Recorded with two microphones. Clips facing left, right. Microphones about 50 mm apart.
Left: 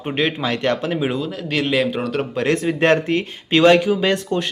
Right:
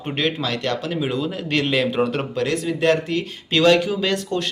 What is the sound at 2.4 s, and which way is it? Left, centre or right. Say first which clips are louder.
Speech: left 2 dB; left.